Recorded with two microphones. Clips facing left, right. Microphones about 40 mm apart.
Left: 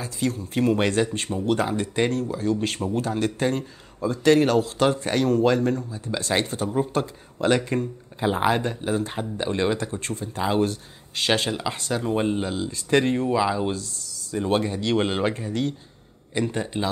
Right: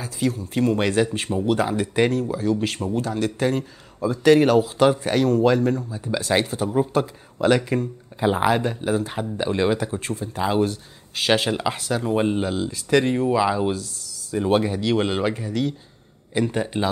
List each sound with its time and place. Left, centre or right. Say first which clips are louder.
0.0 s speech: right 2 dB; centre
0.9 s speech: right 3 dB; centre